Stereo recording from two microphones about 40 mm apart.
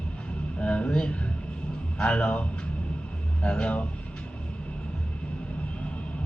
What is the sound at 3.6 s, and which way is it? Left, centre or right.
Speech, left.